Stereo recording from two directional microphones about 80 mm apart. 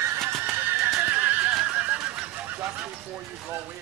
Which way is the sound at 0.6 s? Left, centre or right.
Right.